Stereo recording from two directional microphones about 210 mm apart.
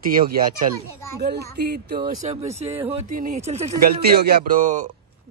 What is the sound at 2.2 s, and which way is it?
Speech, 35° right (ahead or behind).